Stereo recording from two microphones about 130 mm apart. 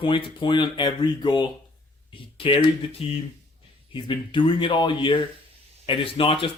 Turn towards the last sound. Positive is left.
turn(degrees=45)  # may be behind; listen again after turning